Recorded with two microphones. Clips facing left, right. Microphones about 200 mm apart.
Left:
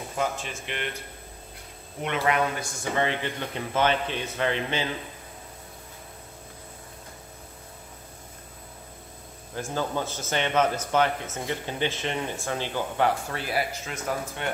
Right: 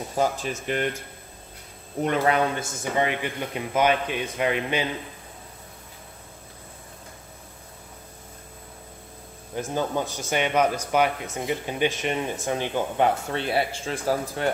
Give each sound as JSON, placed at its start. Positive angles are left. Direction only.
{"t": 0.1, "sound": "speech", "side_deg": -35}
{"t": 2.0, "sound": "speech", "side_deg": -35}
{"t": 9.6, "sound": "speech", "side_deg": -15}